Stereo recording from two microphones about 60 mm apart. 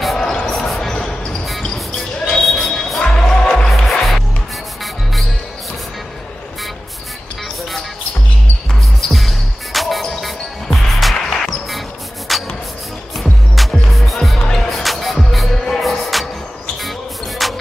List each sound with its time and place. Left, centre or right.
0.0 s basketball bounce: centre
2.0 s music: centre
9.1 s music: centre
17.4 s music: centre